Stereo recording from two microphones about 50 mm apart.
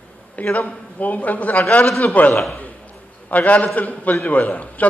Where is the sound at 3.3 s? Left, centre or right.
Left.